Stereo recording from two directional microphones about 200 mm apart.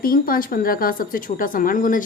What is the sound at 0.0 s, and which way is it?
Speech, 45° left (ahead or behind).